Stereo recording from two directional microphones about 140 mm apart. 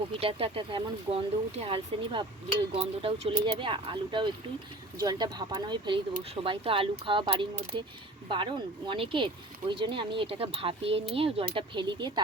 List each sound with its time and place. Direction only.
0.2 s speech: 45° right (ahead or behind)